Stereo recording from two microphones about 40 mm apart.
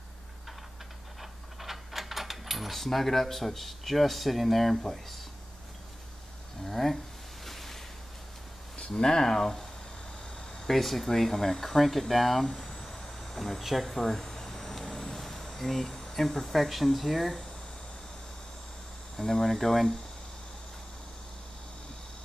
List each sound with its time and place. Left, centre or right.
1.2 s keys jangling: centre
4.8 s speech: centre
6.6 s speech: centre
7.4 s ocean: centre
8.7 s speech: left
10.7 s speech: centre
12.5 s a sound: centre
13.2 s speech: centre
13.8 s a sound: centre
19.1 s speech: centre